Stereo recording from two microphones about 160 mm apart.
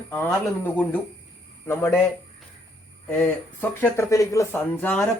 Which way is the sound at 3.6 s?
15° left (ahead or behind).